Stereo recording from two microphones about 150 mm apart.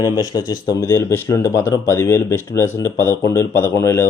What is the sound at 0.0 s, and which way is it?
Speech, 25° left (ahead or behind).